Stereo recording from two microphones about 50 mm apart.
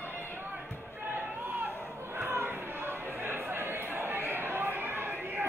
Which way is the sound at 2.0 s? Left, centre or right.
Right.